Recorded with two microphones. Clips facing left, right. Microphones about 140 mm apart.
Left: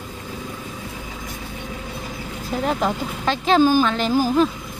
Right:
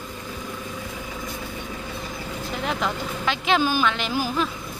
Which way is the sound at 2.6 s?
40° left (ahead or behind).